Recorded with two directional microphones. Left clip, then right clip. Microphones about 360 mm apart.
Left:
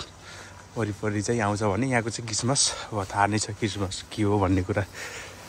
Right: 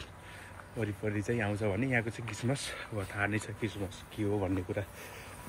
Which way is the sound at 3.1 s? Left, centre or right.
Left.